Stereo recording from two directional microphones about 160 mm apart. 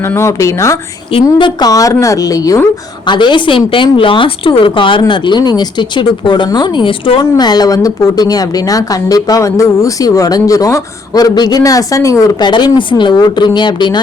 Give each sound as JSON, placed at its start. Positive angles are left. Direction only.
{"t": 0.1, "sound": "a woman's voice", "side_deg": 20}
{"t": 1.1, "sound": "a woman's voice", "side_deg": 30}